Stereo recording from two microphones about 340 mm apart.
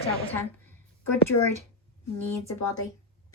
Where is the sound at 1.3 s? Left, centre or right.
Left.